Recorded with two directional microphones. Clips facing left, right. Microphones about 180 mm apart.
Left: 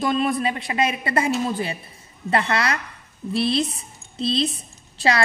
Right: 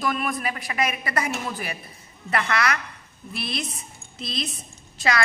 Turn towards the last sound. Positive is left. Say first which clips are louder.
# left 4 dB
turn(degrees=30)  # may be behind; listen again after turning